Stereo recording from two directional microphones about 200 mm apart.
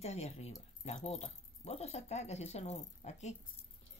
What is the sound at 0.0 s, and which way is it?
Speech, 30° left (ahead or behind).